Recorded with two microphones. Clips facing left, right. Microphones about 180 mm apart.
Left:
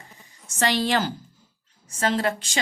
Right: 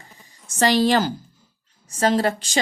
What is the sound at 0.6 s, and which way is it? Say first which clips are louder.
A woman's voice: right 5 dB; 40° right (ahead or behind).